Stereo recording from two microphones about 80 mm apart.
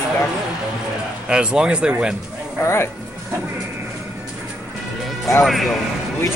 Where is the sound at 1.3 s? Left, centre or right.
Centre.